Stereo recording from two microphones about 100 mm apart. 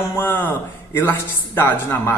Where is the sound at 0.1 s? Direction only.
20° left (ahead or behind).